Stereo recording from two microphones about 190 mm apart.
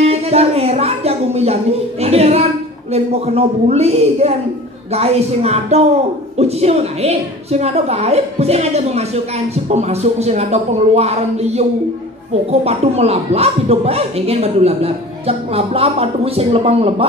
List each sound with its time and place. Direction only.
0.0 s music: 35° right (ahead or behind)
2.9 s speech: 35° right (ahead or behind)